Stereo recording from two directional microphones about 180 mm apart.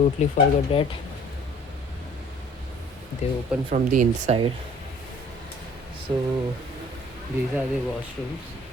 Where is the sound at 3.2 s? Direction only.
40° left (ahead or behind).